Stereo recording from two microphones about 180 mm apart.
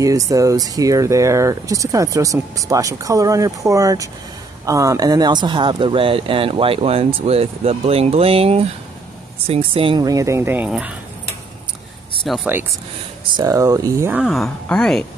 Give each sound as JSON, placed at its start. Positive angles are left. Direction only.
{"t": 0.0, "sound": "speech", "side_deg": -20}
{"t": 12.3, "sound": "a woman's voice", "side_deg": 0}
{"t": 13.3, "sound": "speech", "side_deg": -20}
{"t": 14.2, "sound": "a woman's voice", "side_deg": 0}